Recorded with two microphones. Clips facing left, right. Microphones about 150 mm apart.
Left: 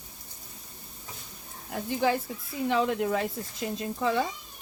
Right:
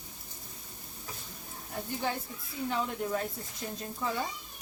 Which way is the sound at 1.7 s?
90° left.